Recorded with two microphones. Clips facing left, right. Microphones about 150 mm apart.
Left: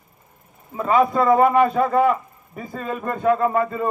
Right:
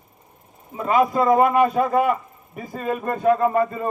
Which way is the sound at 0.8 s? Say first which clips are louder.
Left 1 dB; 20° right (ahead or behind).